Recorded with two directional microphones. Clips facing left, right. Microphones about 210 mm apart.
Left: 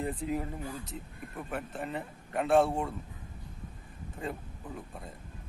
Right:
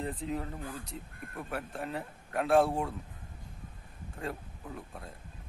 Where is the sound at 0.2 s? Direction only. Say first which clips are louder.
Left 2 dB; 10° left (ahead or behind).